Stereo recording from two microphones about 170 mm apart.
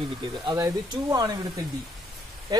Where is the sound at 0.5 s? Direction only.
20° right (ahead or behind).